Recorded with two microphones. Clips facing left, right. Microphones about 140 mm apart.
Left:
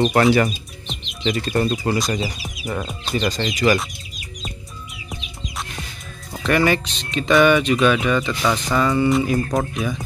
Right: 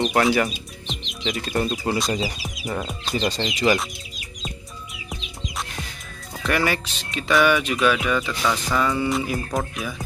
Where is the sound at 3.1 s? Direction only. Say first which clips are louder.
Left 2 dB; 30° right (ahead or behind).